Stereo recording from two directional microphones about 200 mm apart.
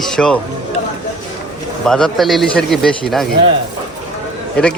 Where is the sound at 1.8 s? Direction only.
Centre (ahead or behind).